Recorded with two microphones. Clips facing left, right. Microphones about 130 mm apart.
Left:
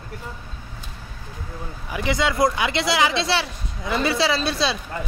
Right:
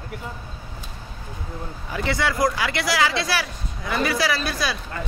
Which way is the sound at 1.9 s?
15° left (ahead or behind).